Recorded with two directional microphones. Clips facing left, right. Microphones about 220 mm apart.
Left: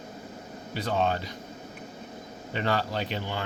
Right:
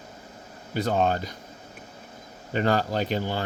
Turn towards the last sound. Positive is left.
turn(degrees=-40)  # may be behind; listen again after turning